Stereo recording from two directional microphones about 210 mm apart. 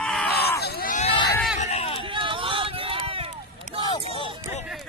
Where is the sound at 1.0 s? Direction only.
20° left (ahead or behind).